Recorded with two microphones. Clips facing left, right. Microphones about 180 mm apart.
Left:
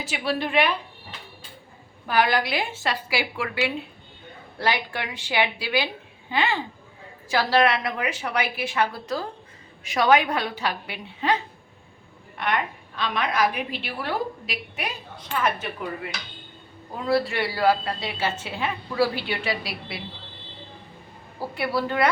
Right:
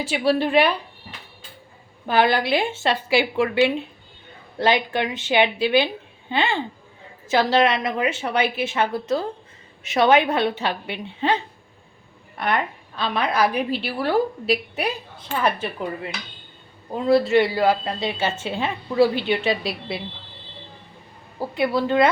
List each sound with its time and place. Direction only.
0.0 s a woman's voice: 30° right (ahead or behind)
2.0 s a woman's voice: 25° right (ahead or behind)
16.9 s a woman's voice: 20° right (ahead or behind)
21.5 s a woman's voice: 20° right (ahead or behind)